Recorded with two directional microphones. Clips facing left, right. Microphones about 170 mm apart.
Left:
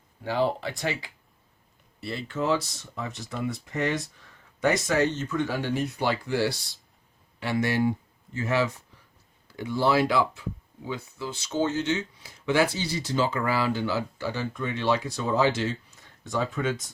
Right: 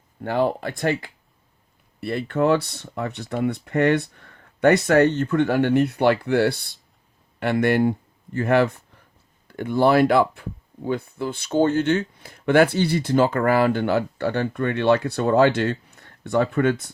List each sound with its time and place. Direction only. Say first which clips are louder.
0.2 s speech: right 4 dB; 55° right (ahead or behind)